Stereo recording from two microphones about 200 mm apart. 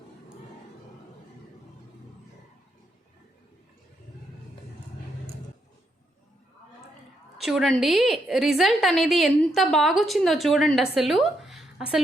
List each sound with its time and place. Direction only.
7.3 s a woman's voice: centre (ahead or behind)